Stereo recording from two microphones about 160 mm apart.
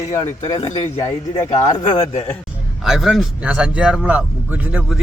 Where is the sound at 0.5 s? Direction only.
35° left (ahead or behind).